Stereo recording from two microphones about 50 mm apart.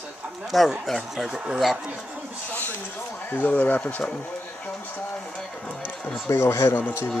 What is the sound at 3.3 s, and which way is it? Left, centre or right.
Speech, left.